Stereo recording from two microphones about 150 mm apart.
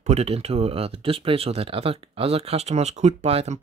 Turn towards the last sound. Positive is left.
turn(degrees=-45)  # may be behind; listen again after turning